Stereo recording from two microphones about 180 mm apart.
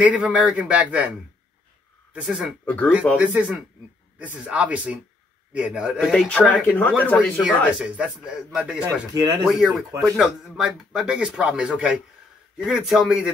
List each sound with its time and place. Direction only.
0.0 s speech: 5° right (ahead or behind)
2.1 s speech: 5° right (ahead or behind)
2.6 s speech: 10° left (ahead or behind)
3.2 s speech: 5° right (ahead or behind)
7.2 s speech: 5° right (ahead or behind)
9.1 s speech: 20° right (ahead or behind)
9.8 s speech: centre (ahead or behind)